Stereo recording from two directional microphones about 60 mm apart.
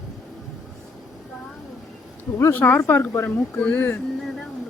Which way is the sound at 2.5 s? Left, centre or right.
Left.